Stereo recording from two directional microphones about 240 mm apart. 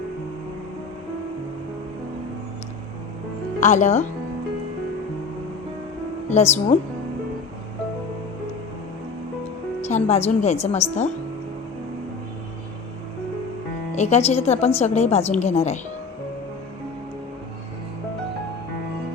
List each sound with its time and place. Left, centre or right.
3.6 s a woman's voice: left
6.2 s a woman's voice: left
9.8 s a woman's voice: left
13.9 s a woman's voice: left